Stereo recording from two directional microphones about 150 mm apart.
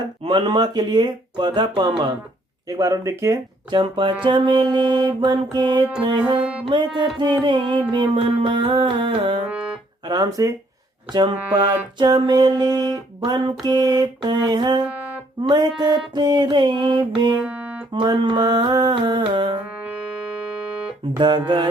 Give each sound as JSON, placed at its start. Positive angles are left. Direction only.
{"t": 0.3, "sound": "music", "side_deg": -35}
{"t": 3.7, "sound": "music", "side_deg": -30}
{"t": 6.4, "sound": "music", "side_deg": -5}
{"t": 6.7, "sound": "music", "side_deg": -30}
{"t": 10.1, "sound": "music", "side_deg": -25}
{"t": 17.4, "sound": "music", "side_deg": -10}
{"t": 17.9, "sound": "music", "side_deg": -30}
{"t": 21.2, "sound": "music", "side_deg": -30}